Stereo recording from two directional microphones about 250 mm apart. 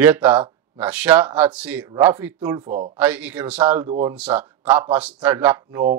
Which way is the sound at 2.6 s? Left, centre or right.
Right.